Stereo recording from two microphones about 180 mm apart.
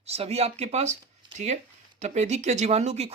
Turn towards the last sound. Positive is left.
turn(degrees=-35)  # may be behind; listen again after turning